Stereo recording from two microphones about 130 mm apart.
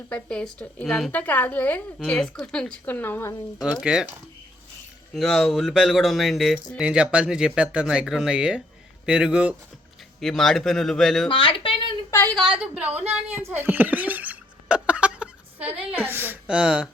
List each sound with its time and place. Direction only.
0.1 s speech: 10° left (ahead or behind)
3.6 s speech: 5° right (ahead or behind)
5.1 s a woman's voice: 5° left (ahead or behind)
10.2 s speech: 5° left (ahead or behind)
11.3 s a sound: 40° left (ahead or behind)
12.3 s speech: centre (ahead or behind)
12.5 s a woman's voice: 10° right (ahead or behind)
13.3 s a sound: 15° right (ahead or behind)
15.9 s a woman's voice: 15° right (ahead or behind)